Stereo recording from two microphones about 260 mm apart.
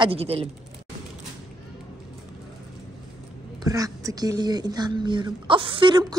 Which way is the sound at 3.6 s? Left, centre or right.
Centre.